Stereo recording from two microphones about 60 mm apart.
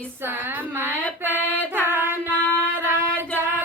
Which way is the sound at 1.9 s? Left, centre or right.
Right.